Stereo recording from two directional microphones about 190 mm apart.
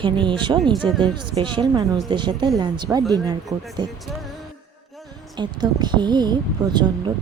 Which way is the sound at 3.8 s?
20° right (ahead or behind).